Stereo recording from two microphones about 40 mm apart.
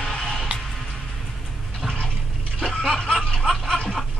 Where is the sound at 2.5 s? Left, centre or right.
Centre.